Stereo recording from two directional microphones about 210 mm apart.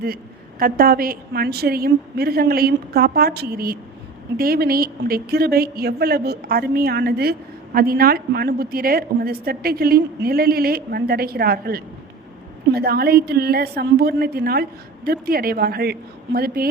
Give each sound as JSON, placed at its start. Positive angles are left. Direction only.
{"t": 0.6, "sound": "a woman's voice", "side_deg": -45}